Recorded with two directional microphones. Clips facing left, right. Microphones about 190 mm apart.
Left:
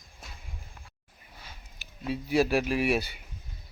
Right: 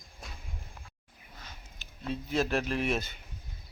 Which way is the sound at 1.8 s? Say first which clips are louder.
Left 3 dB; 10° left (ahead or behind).